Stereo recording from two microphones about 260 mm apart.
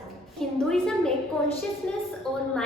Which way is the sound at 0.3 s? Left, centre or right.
Centre.